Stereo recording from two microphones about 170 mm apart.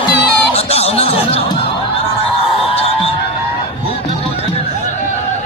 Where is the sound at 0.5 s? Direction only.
35° left (ahead or behind).